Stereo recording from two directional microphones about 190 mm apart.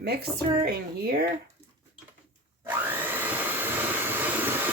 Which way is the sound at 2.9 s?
10° right (ahead or behind).